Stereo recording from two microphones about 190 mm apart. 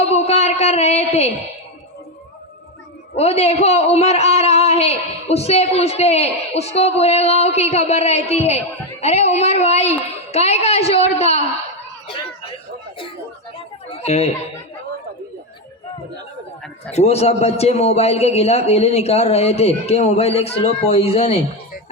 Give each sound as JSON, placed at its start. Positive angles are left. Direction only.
{"t": 0.0, "sound": "a sound", "side_deg": 35}
{"t": 3.2, "sound": "a man's voice", "side_deg": 35}
{"t": 13.9, "sound": "speech", "side_deg": 35}
{"t": 16.9, "sound": "a man's voice", "side_deg": 35}